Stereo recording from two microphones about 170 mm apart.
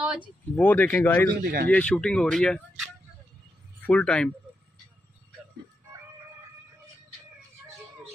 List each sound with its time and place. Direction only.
0.0 s a sound: 5° right (ahead or behind)
0.6 s speech: 10° left (ahead or behind)
1.4 s speech: 65° right (ahead or behind)
1.7 s speech: 5° left (ahead or behind)